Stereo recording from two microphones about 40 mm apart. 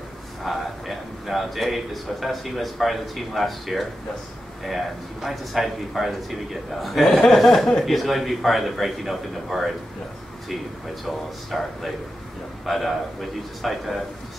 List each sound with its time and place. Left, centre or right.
0.4 s a man's voice: centre
7.8 s a man's voice: centre
11.1 s a man's voice: centre